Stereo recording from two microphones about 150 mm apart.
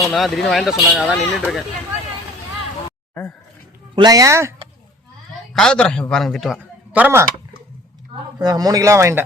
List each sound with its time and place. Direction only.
0.0 s speech: centre (ahead or behind)
3.9 s speech: 25° right (ahead or behind)
5.5 s a man's voice: 5° left (ahead or behind)
7.0 s speech: 15° right (ahead or behind)
8.4 s speech: 25° right (ahead or behind)